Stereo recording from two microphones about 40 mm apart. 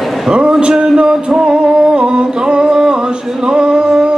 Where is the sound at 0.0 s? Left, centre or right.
Centre.